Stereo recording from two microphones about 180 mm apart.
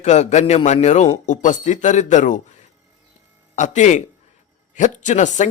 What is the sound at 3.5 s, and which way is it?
Speech, 40° left (ahead or behind).